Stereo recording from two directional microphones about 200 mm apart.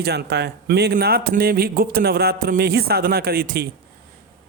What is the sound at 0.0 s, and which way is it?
A man's voice, 55° right (ahead or behind).